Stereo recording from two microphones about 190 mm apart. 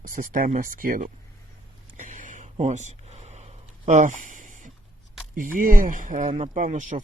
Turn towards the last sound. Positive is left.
turn(degrees=-40)  # may be behind; listen again after turning